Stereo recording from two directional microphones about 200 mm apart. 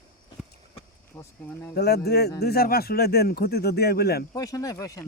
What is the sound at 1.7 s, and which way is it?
Speech, 55° left (ahead or behind).